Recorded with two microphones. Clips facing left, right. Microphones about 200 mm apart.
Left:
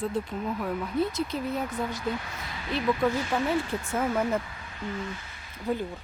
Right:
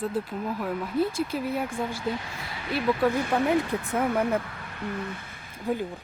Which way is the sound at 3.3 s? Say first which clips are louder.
Right 3 dB; 20° right (ahead or behind).